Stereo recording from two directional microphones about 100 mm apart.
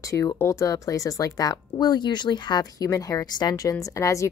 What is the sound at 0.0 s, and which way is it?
Speech, 30° left (ahead or behind).